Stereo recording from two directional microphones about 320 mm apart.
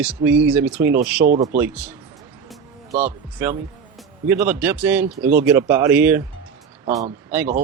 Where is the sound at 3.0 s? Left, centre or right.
Centre.